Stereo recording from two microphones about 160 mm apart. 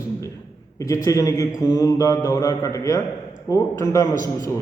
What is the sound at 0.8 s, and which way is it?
A man's voice, 20° left (ahead or behind).